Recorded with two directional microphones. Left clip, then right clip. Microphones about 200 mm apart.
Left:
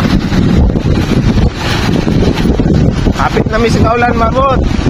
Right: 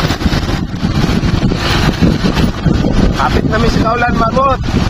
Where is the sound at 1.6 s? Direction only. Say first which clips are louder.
Even; centre (ahead or behind).